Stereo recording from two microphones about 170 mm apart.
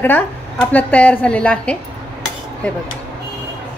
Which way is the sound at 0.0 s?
10° left (ahead or behind).